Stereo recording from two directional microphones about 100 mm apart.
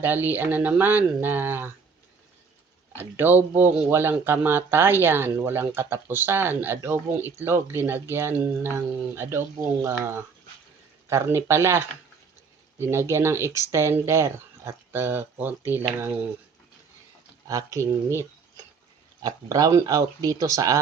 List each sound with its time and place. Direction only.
0.0 s speech: 20° right (ahead or behind)
2.9 s speech: 20° right (ahead or behind)
12.8 s speech: 25° right (ahead or behind)
17.5 s speech: 35° right (ahead or behind)